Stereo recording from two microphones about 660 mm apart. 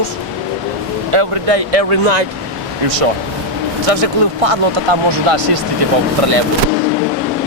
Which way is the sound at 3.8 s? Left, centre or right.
Right.